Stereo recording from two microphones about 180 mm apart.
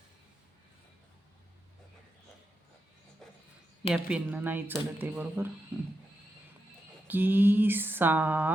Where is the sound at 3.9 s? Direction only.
5° right (ahead or behind).